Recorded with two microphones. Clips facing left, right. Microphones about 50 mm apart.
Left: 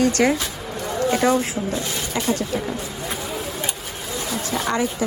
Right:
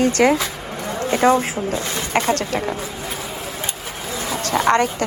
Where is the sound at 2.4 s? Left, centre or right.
Right.